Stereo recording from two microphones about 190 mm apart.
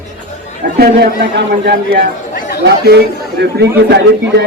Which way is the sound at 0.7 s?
55° right (ahead or behind).